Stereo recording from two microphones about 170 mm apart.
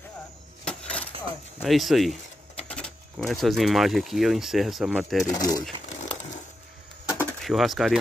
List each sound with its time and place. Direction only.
0.7 s a sound: 5° left (ahead or behind)
1.6 s speech: centre (ahead or behind)
5.2 s speech: 20° left (ahead or behind)
7.1 s bird: 5° right (ahead or behind)